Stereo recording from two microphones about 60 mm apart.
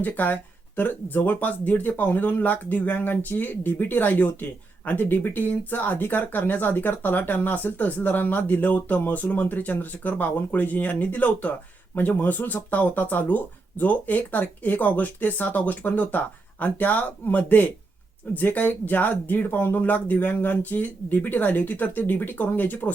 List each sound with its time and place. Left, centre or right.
0.0 s speech: left